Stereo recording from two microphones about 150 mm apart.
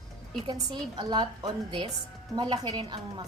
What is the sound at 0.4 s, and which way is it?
A woman's voice, 30° right (ahead or behind).